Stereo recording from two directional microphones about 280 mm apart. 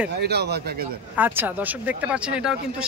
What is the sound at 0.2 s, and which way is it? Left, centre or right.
Speech, right.